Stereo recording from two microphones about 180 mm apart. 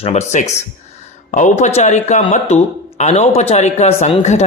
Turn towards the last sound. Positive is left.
turn(degrees=40)  # may be behind; listen again after turning